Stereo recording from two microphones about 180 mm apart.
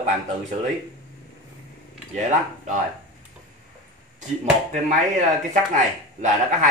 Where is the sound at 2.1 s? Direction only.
40° right (ahead or behind).